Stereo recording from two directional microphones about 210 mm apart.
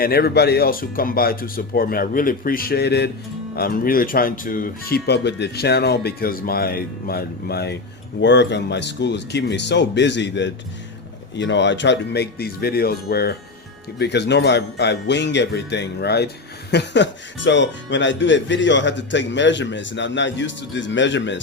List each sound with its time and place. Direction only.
0.0 s speech: 50° left (ahead or behind)